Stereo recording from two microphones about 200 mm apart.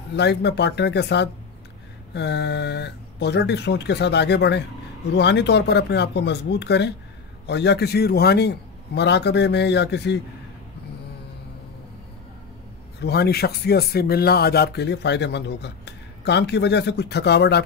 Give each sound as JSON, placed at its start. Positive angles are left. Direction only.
{"t": 0.1, "sound": "speech", "side_deg": 60}
{"t": 13.0, "sound": "speech", "side_deg": 55}